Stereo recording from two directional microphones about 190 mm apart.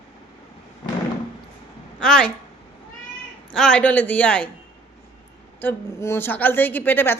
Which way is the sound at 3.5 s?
5° left (ahead or behind).